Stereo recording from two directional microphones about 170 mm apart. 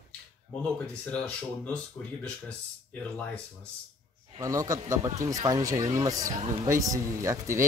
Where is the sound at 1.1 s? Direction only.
5° left (ahead or behind).